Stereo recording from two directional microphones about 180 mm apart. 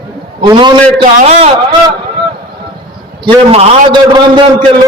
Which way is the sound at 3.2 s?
30° right (ahead or behind).